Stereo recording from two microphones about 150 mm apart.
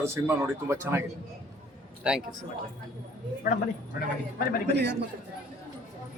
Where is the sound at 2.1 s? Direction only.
5° right (ahead or behind).